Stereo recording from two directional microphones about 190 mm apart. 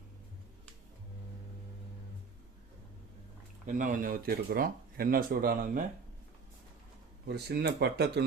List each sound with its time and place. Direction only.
3.7 s speech: 45° right (ahead or behind)
7.3 s speech: 60° right (ahead or behind)